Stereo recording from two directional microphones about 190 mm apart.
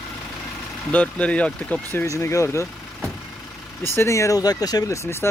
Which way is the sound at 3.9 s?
15° left (ahead or behind).